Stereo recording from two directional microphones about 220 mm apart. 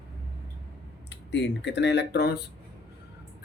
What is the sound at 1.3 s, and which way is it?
Speech, 55° left (ahead or behind).